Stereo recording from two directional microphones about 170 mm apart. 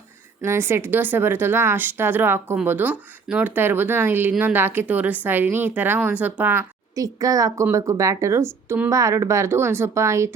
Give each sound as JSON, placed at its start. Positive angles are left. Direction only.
{"t": 0.4, "sound": "speech", "side_deg": -15}